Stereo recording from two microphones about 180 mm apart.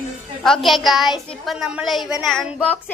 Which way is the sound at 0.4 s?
Centre (ahead or behind).